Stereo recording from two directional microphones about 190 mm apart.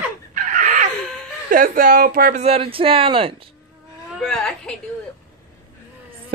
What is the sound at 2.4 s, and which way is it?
Speech, 30° right (ahead or behind).